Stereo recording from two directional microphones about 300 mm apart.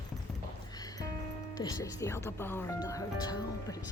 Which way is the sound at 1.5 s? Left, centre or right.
Centre.